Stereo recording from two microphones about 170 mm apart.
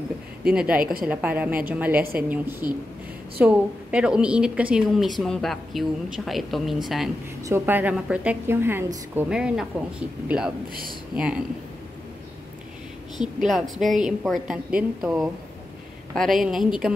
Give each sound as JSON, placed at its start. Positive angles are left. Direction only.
{"t": 0.5, "sound": "a woman's voice", "side_deg": -5}
{"t": 7.4, "sound": "a woman's voice", "side_deg": -15}
{"t": 13.2, "sound": "a woman's voice", "side_deg": -5}